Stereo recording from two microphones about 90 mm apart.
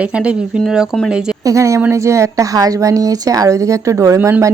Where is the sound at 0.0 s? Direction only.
15° right (ahead or behind).